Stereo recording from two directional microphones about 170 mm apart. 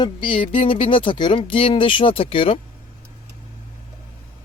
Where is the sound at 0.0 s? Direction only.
30° left (ahead or behind).